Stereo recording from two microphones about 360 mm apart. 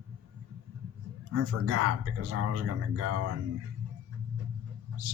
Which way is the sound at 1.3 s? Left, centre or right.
Right.